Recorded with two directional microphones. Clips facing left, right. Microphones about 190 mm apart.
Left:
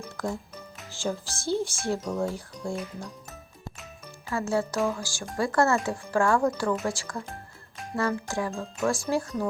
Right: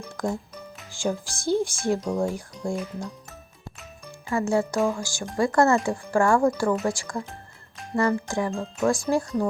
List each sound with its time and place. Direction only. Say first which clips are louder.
0.2 s speech: right 4 dB; 15° right (ahead or behind)
4.3 s speech: right 4 dB; 15° right (ahead or behind)